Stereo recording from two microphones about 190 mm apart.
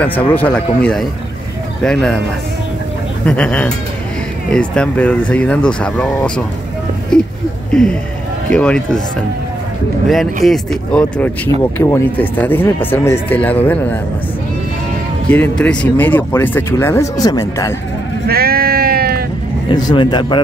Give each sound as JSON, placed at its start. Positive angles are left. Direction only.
{"t": 0.0, "sound": "speech", "side_deg": 10}
{"t": 3.3, "sound": "speech", "side_deg": 5}
{"t": 7.7, "sound": "speech", "side_deg": 5}
{"t": 10.0, "sound": "speech", "side_deg": 0}
{"t": 15.2, "sound": "speech", "side_deg": 10}
{"t": 18.2, "sound": "sheep", "side_deg": -55}
{"t": 19.7, "sound": "speech", "side_deg": 20}